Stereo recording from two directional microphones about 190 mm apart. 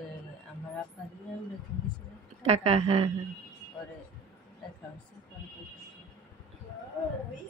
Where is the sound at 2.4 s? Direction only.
35° right (ahead or behind).